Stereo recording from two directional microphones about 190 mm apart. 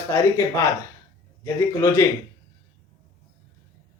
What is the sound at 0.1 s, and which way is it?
Speech, 15° left (ahead or behind).